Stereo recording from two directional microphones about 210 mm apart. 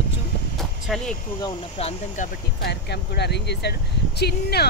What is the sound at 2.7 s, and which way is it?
Speech, 50° left (ahead or behind).